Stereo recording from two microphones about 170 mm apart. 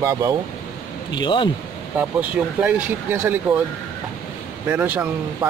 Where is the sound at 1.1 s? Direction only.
25° left (ahead or behind).